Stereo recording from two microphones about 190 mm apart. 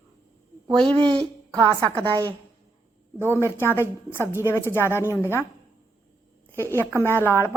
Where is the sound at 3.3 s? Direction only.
10° left (ahead or behind).